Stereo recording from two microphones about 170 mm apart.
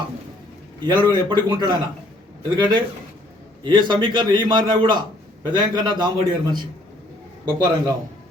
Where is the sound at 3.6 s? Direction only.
25° right (ahead or behind).